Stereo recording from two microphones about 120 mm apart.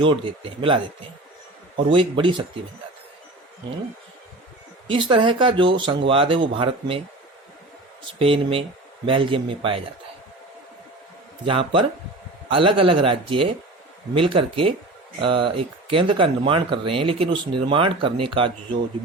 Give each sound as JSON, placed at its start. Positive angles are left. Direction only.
{"t": 0.0, "sound": "speech", "side_deg": -45}
{"t": 4.9, "sound": "speech", "side_deg": -50}
{"t": 8.2, "sound": "speech", "side_deg": -50}
{"t": 11.4, "sound": "speech", "side_deg": -45}